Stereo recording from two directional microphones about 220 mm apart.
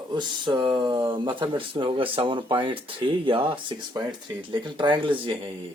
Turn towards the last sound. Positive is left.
turn(degrees=-25)  # may be behind; listen again after turning